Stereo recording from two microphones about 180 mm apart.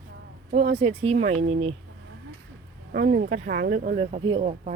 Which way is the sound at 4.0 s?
40° right (ahead or behind).